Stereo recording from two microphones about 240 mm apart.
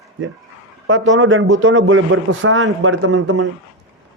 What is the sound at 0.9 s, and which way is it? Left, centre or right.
A man's voice, right.